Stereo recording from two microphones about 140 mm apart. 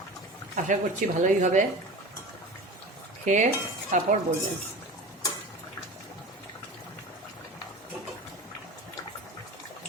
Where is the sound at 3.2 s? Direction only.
60° right (ahead or behind).